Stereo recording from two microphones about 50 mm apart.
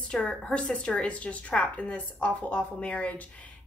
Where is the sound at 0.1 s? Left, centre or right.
Left.